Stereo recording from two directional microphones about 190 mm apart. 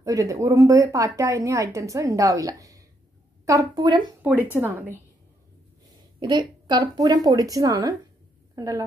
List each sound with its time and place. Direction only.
0.0 s a woman's voice: 15° right (ahead or behind)
4.2 s speech: 10° right (ahead or behind)
6.1 s a woman's voice: 25° right (ahead or behind)